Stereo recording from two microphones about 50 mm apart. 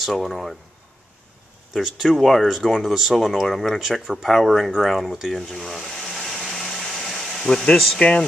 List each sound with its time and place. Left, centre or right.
0.0 s speech: centre
1.7 s speech: centre
2.5 s speech: centre
5.1 s a sound: centre